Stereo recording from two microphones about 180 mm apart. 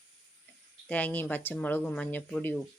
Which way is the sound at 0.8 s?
10° left (ahead or behind).